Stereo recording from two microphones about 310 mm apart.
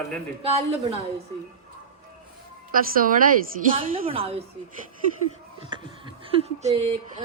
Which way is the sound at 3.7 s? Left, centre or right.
Centre.